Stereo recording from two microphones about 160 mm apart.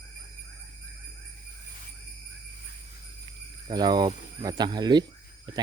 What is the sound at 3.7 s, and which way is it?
Speech, 25° right (ahead or behind).